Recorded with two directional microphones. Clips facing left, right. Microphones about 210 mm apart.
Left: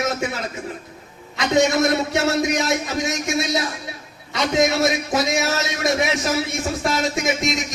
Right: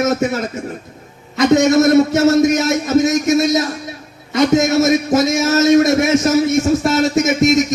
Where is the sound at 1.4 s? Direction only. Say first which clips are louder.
Right 7 dB; 40° right (ahead or behind).